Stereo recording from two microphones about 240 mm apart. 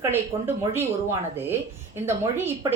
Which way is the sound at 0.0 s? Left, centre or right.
Centre.